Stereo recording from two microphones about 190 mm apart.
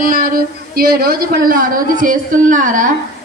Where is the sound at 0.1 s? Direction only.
50° right (ahead or behind).